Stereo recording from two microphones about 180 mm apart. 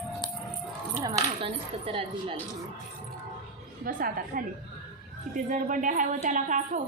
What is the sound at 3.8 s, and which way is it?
Speech, 50° right (ahead or behind).